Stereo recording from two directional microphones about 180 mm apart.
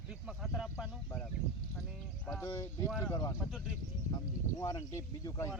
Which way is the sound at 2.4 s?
15° left (ahead or behind).